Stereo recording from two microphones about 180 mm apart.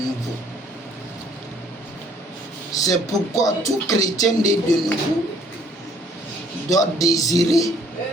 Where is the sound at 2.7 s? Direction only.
20° left (ahead or behind).